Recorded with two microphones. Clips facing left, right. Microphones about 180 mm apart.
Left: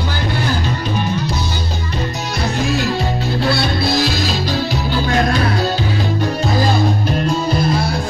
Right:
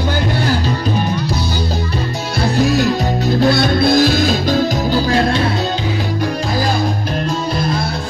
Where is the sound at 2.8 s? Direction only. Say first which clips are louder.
Right 3 dB; 45° right (ahead or behind).